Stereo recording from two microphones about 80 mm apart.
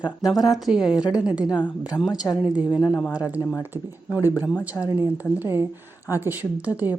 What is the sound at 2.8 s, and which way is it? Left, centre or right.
Speech, centre.